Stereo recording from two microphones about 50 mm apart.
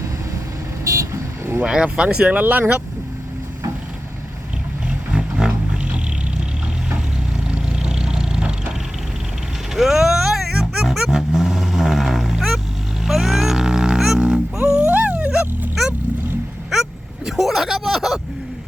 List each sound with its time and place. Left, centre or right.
0.9 s vehicle: right
1.6 s speech: centre
2.4 s speech: right
5.1 s roaring cats: centre
7.5 s vehicle: centre
9.7 s music: centre
11.3 s vehicle: centre
13.1 s music: centre
14.6 s music: right
17.2 s speech: centre